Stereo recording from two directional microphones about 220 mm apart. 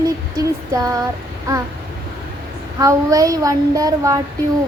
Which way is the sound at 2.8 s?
15° right (ahead or behind).